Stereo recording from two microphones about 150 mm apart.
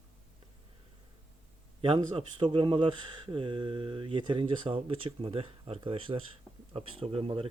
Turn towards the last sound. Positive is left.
turn(degrees=-40)  # may be behind; listen again after turning